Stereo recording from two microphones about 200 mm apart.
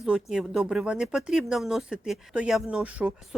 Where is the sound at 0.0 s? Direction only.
5° right (ahead or behind).